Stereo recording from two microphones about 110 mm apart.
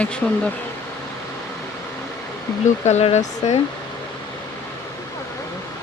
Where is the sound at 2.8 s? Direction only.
90° left.